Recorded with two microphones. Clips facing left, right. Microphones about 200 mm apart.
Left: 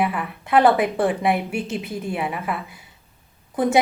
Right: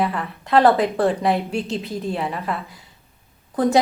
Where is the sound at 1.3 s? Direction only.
20° right (ahead or behind).